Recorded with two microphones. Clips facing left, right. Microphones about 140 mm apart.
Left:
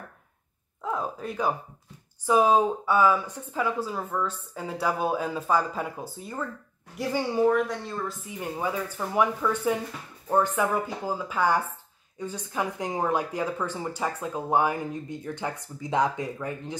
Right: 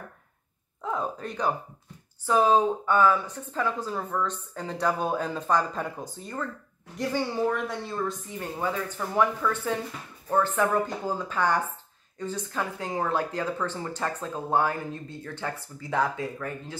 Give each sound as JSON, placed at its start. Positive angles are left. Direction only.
{"t": 0.8, "sound": "speech", "side_deg": 5}
{"t": 7.5, "sound": "speech", "side_deg": 0}
{"t": 8.3, "sound": "speech", "side_deg": 10}